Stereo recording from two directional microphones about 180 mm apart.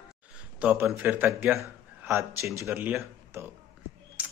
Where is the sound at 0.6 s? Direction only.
5° right (ahead or behind).